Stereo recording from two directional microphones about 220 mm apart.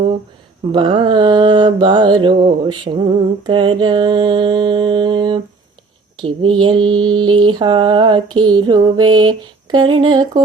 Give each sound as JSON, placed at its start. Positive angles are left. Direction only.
{"t": 0.7, "sound": "mantra", "side_deg": -20}